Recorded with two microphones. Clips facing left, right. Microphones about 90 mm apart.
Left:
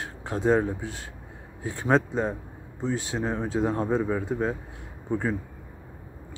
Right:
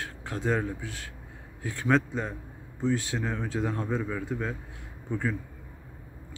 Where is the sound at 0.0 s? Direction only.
25° left (ahead or behind).